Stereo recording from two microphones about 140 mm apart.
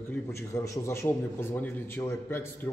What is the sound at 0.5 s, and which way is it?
A man's voice, 20° left (ahead or behind).